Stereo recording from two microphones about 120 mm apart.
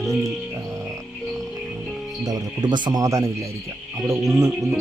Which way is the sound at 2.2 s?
35° right (ahead or behind).